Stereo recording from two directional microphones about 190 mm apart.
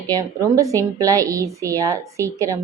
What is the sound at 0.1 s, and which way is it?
A woman's voice, 20° right (ahead or behind).